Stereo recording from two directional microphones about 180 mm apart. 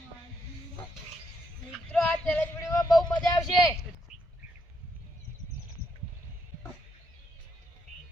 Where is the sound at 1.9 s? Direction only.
10° left (ahead or behind).